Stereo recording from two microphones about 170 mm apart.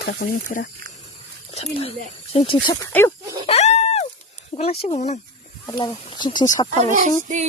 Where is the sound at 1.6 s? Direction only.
35° left (ahead or behind).